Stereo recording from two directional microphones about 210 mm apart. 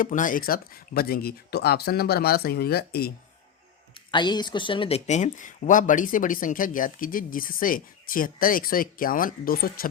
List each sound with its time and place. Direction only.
0.0 s speech: 40° left (ahead or behind)
3.9 s speech: 20° left (ahead or behind); by 9.9 s 45° left (ahead or behind)